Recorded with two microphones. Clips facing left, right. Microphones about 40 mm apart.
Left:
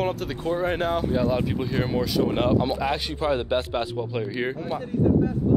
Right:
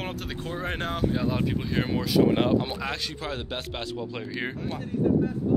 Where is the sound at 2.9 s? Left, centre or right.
Centre.